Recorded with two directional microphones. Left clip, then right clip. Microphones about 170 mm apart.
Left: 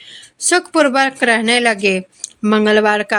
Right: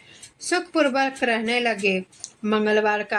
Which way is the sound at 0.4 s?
50° left (ahead or behind).